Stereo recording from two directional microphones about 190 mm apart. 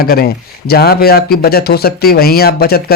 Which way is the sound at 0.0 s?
55° left (ahead or behind).